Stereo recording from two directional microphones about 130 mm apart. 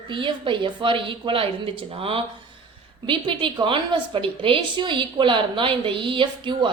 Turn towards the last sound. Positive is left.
turn(degrees=-35)  # may be behind; listen again after turning